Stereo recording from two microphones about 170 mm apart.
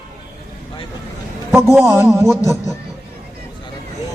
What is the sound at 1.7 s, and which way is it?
Speech, 15° right (ahead or behind).